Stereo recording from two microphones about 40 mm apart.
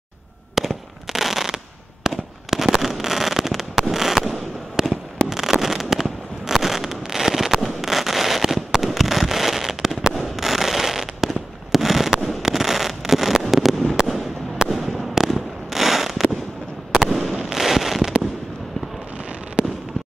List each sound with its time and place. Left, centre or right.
0.6 s fireworks: centre
4.8 s fireworks: centre